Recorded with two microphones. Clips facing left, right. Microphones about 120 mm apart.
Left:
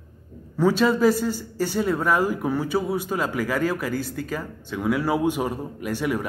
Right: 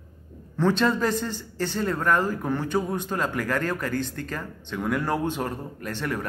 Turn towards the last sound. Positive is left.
turn(degrees=10)  # may be behind; listen again after turning